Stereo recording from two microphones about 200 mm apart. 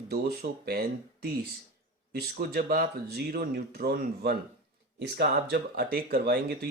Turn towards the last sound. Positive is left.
turn(degrees=-55)  # may be behind; listen again after turning